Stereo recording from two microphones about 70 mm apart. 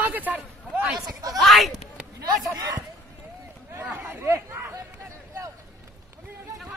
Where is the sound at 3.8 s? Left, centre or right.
Right.